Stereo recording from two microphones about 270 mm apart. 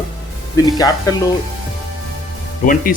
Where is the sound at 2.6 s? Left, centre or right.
Left.